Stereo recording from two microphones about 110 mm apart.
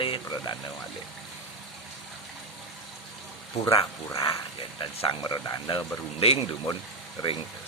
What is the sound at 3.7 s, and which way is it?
Speech, 55° left (ahead or behind).